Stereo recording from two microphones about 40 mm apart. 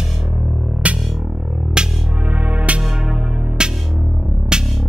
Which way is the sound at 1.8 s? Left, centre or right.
Right.